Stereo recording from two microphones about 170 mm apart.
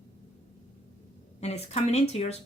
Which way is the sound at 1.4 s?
40° left (ahead or behind).